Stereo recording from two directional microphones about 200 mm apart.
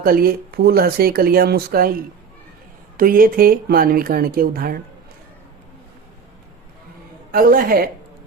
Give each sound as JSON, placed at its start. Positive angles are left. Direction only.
{"t": 0.0, "sound": "speech", "side_deg": -45}
{"t": 3.0, "sound": "speech", "side_deg": -45}
{"t": 7.3, "sound": "a woman's voice", "side_deg": -45}